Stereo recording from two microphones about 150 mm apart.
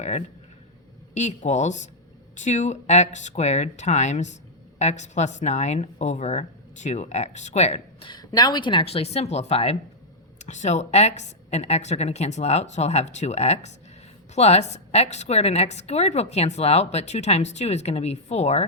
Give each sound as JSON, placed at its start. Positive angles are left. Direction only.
{"t": 1.1, "sound": "a woman's voice", "side_deg": 50}
{"t": 8.0, "sound": "a woman's voice", "side_deg": 30}